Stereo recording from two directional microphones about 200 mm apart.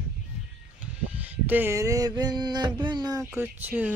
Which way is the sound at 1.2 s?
10° right (ahead or behind).